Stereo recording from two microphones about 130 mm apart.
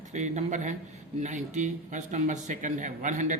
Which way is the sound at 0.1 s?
65° right (ahead or behind).